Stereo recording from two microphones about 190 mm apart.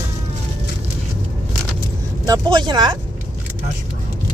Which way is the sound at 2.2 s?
20° right (ahead or behind).